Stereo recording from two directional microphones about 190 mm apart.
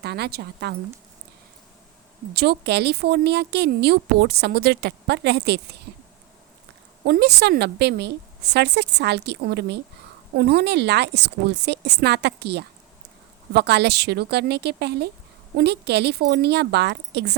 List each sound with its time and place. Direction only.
0.0 s speech: 60° right (ahead or behind)
2.3 s speech: 55° right (ahead or behind)
7.0 s speech: 60° right (ahead or behind)